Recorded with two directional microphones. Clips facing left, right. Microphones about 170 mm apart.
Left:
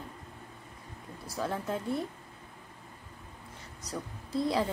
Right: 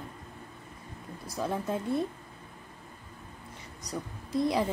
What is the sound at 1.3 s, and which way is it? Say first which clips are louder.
Speech: right 2 dB; 15° right (ahead or behind).